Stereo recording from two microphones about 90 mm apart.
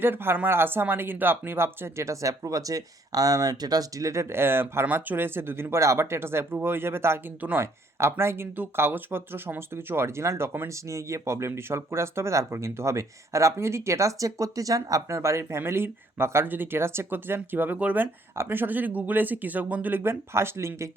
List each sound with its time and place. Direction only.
0.0 s speech: 25° right (ahead or behind)